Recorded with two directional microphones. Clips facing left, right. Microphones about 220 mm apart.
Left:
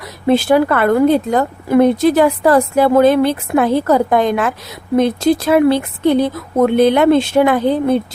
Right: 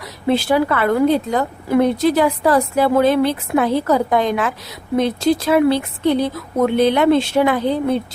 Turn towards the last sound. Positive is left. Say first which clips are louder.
# left 4 dB
turn(degrees=50)  # may be behind; listen again after turning